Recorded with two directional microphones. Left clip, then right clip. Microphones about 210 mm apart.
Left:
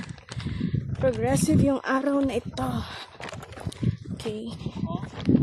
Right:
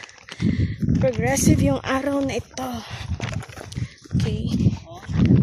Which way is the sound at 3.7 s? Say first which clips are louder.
Even; 10° left (ahead or behind).